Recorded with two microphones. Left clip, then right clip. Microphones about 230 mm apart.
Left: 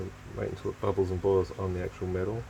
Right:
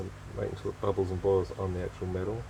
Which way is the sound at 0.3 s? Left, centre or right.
Left.